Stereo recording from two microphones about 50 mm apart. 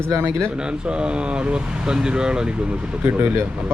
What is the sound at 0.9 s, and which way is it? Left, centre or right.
Speech, right.